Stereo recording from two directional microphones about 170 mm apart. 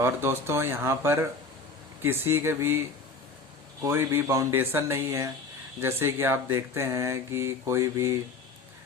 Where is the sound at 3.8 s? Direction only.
15° right (ahead or behind).